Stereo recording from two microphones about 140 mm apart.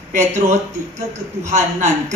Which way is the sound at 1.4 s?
55° right (ahead or behind).